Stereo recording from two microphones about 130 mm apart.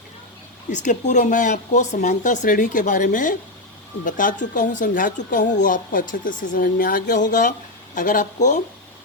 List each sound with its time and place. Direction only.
0.7 s speech: 70° left (ahead or behind)